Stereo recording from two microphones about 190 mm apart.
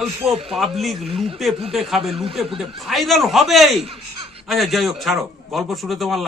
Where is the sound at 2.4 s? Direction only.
30° right (ahead or behind).